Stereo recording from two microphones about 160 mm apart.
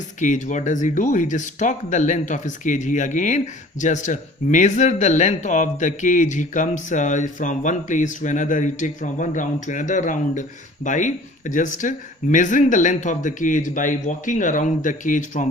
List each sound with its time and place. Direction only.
0.2 s speech: 50° left (ahead or behind)